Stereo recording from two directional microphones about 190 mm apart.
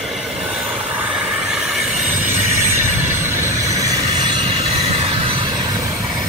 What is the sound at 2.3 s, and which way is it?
Train, 15° right (ahead or behind).